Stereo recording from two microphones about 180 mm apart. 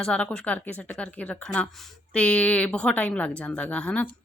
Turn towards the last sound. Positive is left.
turn(degrees=5)  # may be behind; listen again after turning